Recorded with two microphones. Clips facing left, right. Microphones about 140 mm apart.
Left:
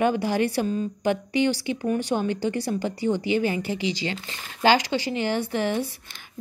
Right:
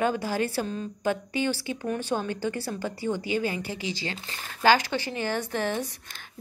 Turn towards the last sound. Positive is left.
turn(degrees=15)  # may be behind; listen again after turning